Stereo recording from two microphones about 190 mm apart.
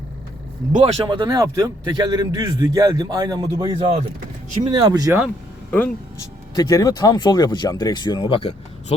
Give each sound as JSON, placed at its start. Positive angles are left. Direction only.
{"t": 0.7, "sound": "speech", "side_deg": -35}
{"t": 1.0, "sound": "a man's voice", "side_deg": -20}
{"t": 6.6, "sound": "speech", "side_deg": 20}